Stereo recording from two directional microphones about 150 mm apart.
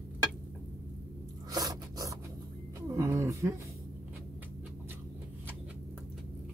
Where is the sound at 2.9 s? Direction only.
20° right (ahead or behind).